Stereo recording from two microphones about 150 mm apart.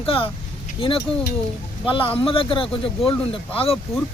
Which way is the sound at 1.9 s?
35° left (ahead or behind).